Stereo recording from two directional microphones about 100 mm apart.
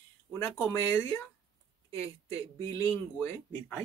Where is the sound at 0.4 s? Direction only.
30° left (ahead or behind).